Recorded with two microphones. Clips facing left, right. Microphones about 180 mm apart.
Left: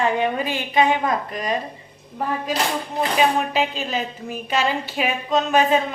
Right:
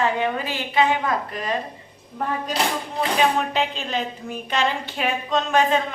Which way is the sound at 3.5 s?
5° left (ahead or behind).